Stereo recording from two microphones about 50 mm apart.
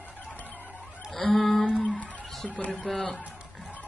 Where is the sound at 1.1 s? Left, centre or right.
Centre.